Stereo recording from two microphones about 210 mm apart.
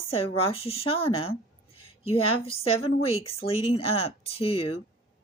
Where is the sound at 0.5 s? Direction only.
25° left (ahead or behind).